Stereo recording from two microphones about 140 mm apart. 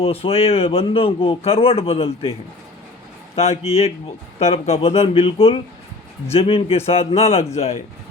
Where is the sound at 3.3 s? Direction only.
45° left (ahead or behind).